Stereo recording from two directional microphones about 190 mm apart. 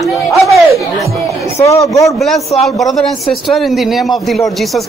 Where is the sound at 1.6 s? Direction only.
15° left (ahead or behind).